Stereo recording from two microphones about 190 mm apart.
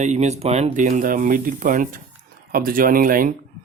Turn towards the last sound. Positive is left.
turn(degrees=-45)  # may be behind; listen again after turning